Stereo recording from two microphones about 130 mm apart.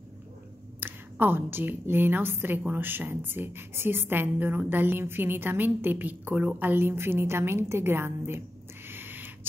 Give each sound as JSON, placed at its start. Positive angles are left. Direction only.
{"t": 0.7, "sound": "a woman's voice", "side_deg": -15}
{"t": 8.8, "sound": "owl", "side_deg": -15}